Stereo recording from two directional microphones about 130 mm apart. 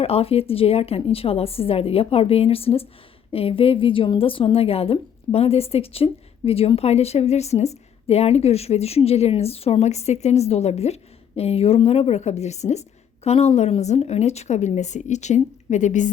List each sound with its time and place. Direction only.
0.0 s a woman's voice: 50° left (ahead or behind); by 16.0 s 70° left (ahead or behind)